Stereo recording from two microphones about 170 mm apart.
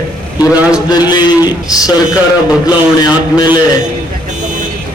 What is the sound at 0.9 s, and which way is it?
Speech, 25° left (ahead or behind).